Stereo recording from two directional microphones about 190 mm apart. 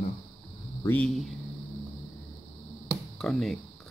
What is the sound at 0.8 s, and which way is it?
Speech, 5° left (ahead or behind).